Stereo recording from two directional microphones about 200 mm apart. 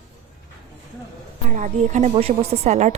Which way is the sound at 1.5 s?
40° right (ahead or behind).